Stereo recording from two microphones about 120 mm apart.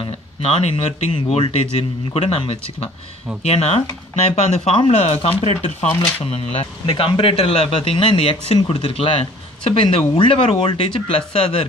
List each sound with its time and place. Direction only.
0.4 s a man's voice: 55° left (ahead or behind)